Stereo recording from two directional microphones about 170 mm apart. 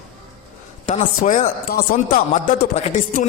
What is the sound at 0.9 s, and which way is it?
Speech, 45° left (ahead or behind).